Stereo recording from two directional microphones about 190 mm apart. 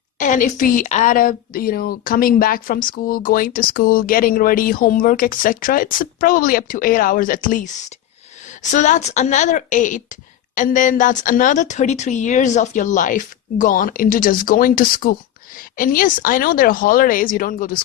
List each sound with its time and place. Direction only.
0.2 s a woman's voice: 40° left (ahead or behind)
8.7 s a woman's voice: 40° left (ahead or behind)